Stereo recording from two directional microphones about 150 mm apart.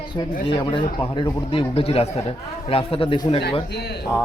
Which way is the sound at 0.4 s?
35° left (ahead or behind).